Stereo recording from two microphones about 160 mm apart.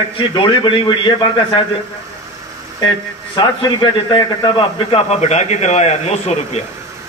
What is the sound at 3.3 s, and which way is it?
A man's voice, 25° left (ahead or behind).